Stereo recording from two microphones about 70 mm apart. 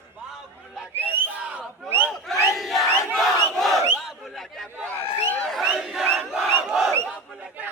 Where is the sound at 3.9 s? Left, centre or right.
Centre.